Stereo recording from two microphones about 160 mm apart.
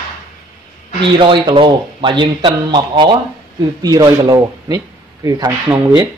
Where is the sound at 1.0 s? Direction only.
30° right (ahead or behind).